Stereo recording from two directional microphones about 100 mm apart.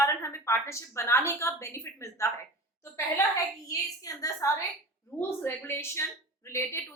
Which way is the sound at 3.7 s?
35° left (ahead or behind).